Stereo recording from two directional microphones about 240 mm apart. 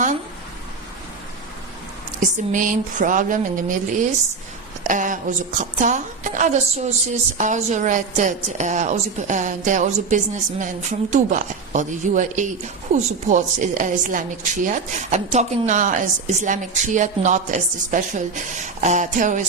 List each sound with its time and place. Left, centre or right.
2.2 s a woman's voice: right